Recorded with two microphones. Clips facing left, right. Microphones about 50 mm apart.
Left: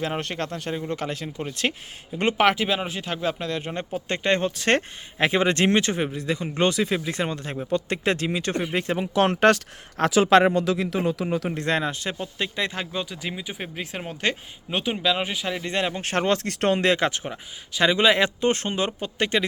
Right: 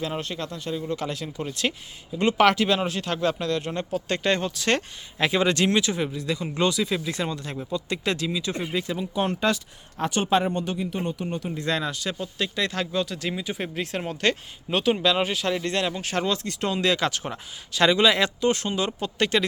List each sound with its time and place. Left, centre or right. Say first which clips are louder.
0.2 s speech: left 2 dB; left
0.8 s speech: even; left
2.4 s speech: right 2 dB; centre; by 9.0 s left
9.1 s speech: left 6 dB; left
11.5 s speech: left 2 dB; left; by 16.0 s centre
16.0 s speech: left 3 dB; left
17.2 s speech: even; centre
18.0 s speech: left 1 dB; left
18.9 s speech: right 1 dB; centre